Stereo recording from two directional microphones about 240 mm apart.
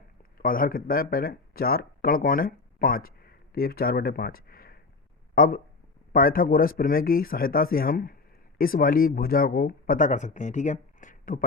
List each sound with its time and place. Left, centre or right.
0.3 s speech: left